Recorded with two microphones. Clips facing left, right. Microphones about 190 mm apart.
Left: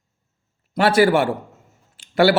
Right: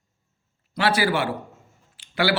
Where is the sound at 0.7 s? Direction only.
45° left (ahead or behind).